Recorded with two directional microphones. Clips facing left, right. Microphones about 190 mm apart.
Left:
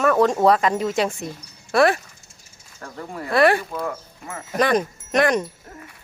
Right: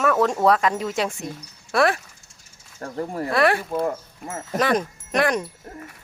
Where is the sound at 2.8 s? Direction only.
35° right (ahead or behind).